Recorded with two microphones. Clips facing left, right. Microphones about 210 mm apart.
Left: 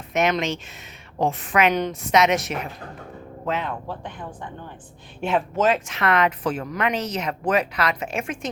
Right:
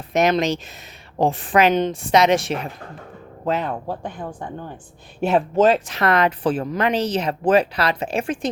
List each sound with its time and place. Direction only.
0.1 s speech: 35° right (ahead or behind)